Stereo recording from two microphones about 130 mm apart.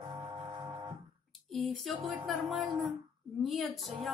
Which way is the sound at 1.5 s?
Centre (ahead or behind).